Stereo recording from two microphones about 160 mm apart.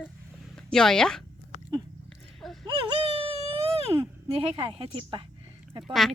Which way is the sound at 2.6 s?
30° right (ahead or behind).